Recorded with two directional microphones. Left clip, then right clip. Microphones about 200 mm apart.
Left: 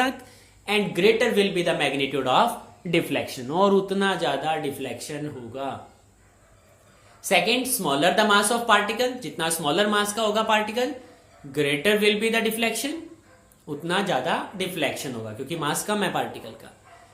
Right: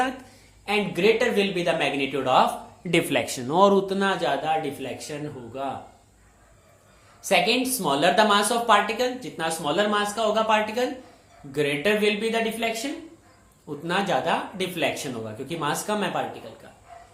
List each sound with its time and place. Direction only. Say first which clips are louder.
0.6 s speech: left 1 dB; 15° left (ahead or behind)
2.8 s a man's voice: right 2 dB; 5° right (ahead or behind); by 5.7 s 15° left (ahead or behind)
7.2 s speech: even; 5° left (ahead or behind); by 12.9 s 30° left (ahead or behind)
13.7 s speech: even; 15° left (ahead or behind)